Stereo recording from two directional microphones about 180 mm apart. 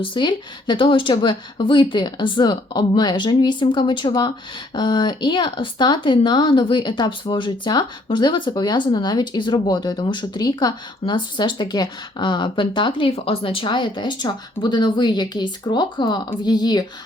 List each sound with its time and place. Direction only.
0.0 s speech: 25° left (ahead or behind)